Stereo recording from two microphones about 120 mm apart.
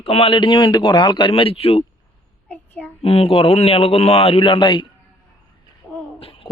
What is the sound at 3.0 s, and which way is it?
A man's voice, 55° left (ahead or behind).